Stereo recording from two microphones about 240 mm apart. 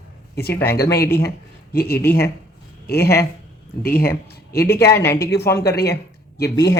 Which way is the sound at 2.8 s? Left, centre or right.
Left.